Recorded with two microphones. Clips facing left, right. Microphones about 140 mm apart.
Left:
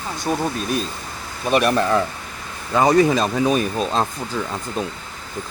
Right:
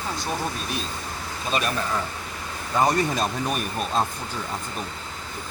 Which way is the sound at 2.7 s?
90° left.